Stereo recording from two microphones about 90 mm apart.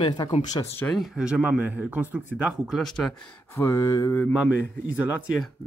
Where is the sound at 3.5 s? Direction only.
30° left (ahead or behind).